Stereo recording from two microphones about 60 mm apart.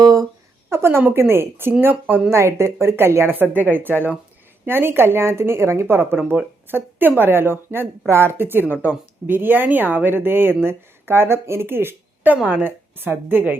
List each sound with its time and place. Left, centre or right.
0.0 s a sound: right
0.7 s a woman's voice: right
2.3 s a woman's voice: right